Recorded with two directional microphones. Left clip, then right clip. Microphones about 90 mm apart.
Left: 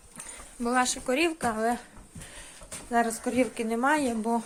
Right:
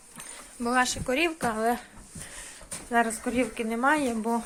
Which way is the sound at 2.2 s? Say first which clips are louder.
Right 3 dB; 40° left (ahead or behind).